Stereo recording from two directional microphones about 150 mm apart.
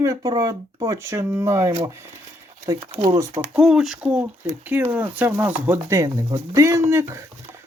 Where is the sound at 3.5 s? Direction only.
5° right (ahead or behind).